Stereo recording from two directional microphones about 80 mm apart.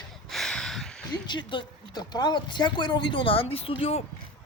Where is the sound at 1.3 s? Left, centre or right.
Left.